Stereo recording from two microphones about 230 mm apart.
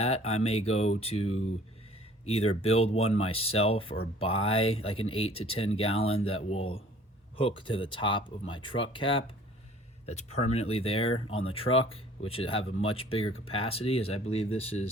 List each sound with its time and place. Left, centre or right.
0.0 s speech: left